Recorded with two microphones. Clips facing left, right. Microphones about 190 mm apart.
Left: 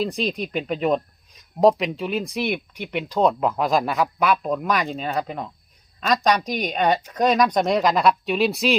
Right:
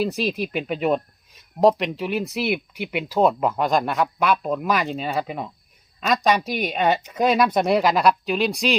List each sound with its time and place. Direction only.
0.0 s speech: 5° right (ahead or behind)